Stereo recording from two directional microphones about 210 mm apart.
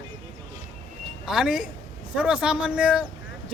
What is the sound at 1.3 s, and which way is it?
Speech, centre (ahead or behind).